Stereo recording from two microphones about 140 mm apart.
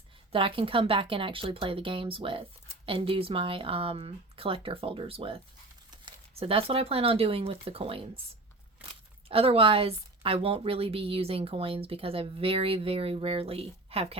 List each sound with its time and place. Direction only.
0.3 s speech: 40° right (ahead or behind)